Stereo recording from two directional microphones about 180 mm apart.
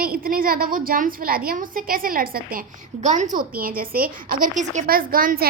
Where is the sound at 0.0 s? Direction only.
55° right (ahead or behind).